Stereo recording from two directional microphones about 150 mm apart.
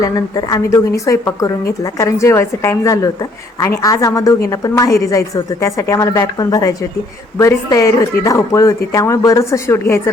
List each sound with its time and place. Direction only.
0.0 s a woman's voice: 25° left (ahead or behind)